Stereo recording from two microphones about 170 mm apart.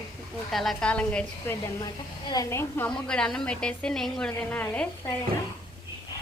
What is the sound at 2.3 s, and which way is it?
Speech, 20° left (ahead or behind).